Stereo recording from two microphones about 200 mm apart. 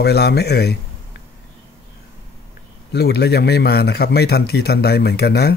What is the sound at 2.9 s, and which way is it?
A man's voice, 55° left (ahead or behind).